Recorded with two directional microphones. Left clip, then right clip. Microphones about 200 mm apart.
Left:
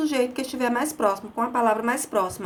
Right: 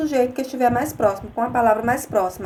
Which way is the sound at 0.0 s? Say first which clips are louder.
Right 4 dB; 15° left (ahead or behind).